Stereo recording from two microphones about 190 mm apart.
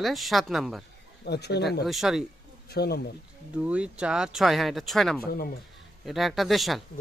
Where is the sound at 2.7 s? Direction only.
55° left (ahead or behind).